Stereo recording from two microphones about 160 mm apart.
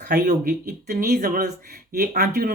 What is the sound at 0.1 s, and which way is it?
Speech, 80° right.